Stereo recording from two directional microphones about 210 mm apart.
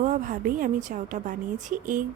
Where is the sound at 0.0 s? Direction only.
40° right (ahead or behind).